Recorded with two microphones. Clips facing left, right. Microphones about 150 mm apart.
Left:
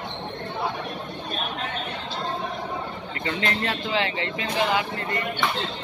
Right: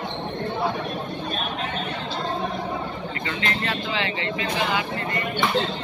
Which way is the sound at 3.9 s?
40° left (ahead or behind).